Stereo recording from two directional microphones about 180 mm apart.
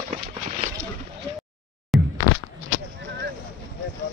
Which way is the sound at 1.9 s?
Centre (ahead or behind).